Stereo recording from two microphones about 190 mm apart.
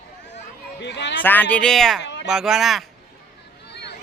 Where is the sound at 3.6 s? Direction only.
65° left (ahead or behind).